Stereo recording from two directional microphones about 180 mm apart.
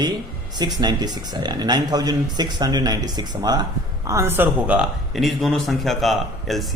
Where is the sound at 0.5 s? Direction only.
25° right (ahead or behind).